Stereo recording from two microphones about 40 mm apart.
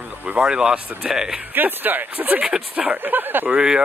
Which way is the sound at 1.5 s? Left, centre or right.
Right.